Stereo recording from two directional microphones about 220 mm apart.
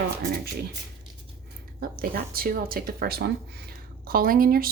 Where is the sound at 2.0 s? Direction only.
40° right (ahead or behind).